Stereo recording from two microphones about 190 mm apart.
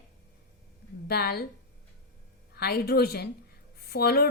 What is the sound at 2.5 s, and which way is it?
A woman's voice, 55° left (ahead or behind).